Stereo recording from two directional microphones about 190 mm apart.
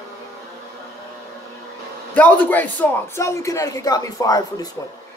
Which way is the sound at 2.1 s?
10° left (ahead or behind).